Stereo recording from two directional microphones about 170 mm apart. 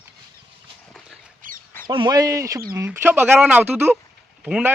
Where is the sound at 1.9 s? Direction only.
30° right (ahead or behind).